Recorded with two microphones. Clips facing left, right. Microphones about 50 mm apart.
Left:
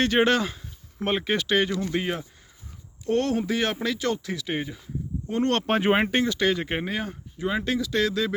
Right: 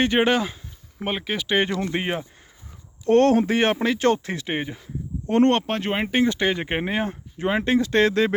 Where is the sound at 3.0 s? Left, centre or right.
Right.